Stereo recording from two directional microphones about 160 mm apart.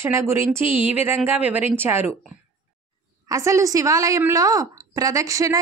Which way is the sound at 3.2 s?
20° right (ahead or behind).